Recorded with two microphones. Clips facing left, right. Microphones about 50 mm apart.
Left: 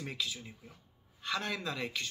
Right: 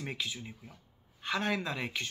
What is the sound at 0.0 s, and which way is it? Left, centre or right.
Speech, right.